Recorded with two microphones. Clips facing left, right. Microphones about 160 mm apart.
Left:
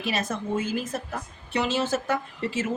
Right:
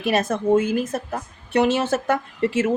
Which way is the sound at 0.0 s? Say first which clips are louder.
Right 8 dB; 55° right (ahead or behind).